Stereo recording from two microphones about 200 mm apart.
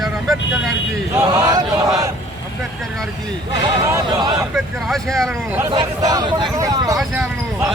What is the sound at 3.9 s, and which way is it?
Speech, 20° right (ahead or behind).